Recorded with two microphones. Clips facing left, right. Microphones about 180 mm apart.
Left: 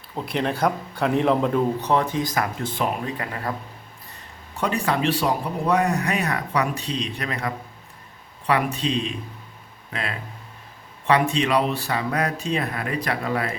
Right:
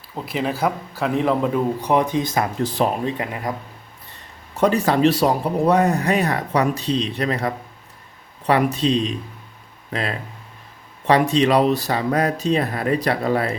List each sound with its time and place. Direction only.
0.2 s a man's voice: 5° right (ahead or behind)
1.9 s speech: 15° right (ahead or behind); by 2.9 s 35° right (ahead or behind)
3.1 s speech: 20° right (ahead or behind)
4.6 s speech: 35° right (ahead or behind)